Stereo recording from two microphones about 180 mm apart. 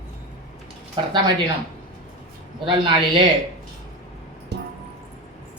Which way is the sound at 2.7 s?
25° right (ahead or behind).